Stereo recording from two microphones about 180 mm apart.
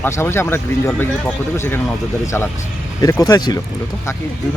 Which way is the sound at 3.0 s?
20° left (ahead or behind).